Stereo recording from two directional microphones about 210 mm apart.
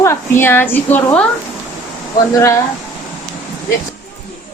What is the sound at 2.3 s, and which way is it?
Speech, 15° left (ahead or behind).